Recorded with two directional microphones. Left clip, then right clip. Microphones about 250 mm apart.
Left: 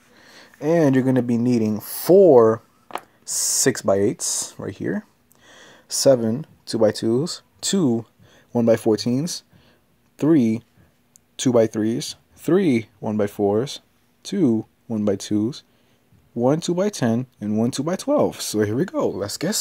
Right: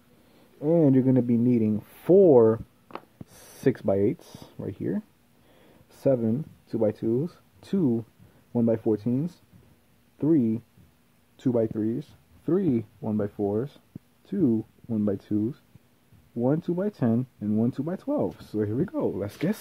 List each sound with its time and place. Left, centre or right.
0.7 s speech: centre; by 13.7 s left
13.7 s a sound: centre
14.5 s speech: left; by 19.6 s centre